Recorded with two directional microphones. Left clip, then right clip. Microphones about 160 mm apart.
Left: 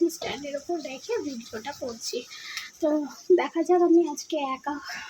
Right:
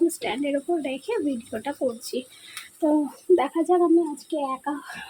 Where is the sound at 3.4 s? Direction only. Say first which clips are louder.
Right 1 dB; 20° right (ahead or behind).